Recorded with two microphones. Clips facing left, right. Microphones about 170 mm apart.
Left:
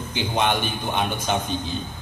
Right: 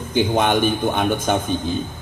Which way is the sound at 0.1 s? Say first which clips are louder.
Right 6 dB; 50° right (ahead or behind).